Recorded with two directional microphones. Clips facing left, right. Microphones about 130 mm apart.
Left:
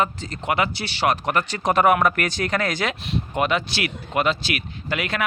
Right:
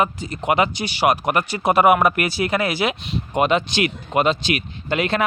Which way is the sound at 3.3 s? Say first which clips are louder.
Right 5 dB; 20° right (ahead or behind).